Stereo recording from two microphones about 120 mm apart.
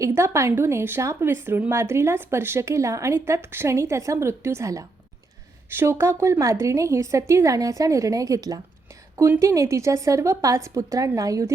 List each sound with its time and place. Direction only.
0.0 s speech: 25° right (ahead or behind)